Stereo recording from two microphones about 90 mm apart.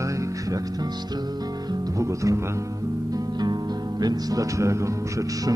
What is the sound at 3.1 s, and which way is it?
Music, 50° right (ahead or behind).